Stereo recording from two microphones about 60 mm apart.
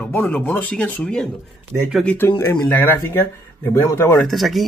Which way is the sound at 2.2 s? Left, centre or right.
Left.